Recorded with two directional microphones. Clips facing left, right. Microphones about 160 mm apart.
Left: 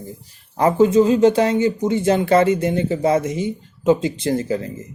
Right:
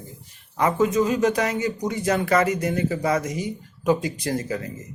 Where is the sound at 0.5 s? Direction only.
30° left (ahead or behind).